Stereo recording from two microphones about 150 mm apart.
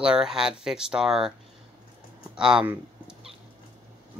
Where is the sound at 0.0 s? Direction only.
5° right (ahead or behind).